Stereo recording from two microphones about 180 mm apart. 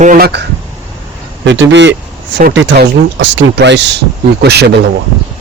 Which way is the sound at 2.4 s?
70° right (ahead or behind).